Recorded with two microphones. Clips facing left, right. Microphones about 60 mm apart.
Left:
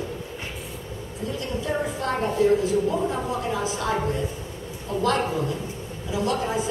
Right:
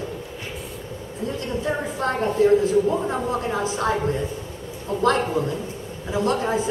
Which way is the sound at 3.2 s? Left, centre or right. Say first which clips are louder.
Right 2 dB; right.